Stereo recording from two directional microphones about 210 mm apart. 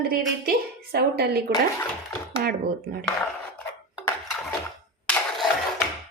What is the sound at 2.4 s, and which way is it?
Speech, 45° right (ahead or behind).